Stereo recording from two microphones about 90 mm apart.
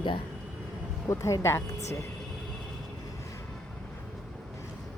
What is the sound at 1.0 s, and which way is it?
Speech, 35° left (ahead or behind).